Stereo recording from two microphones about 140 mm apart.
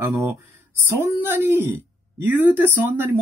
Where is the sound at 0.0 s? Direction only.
20° right (ahead or behind).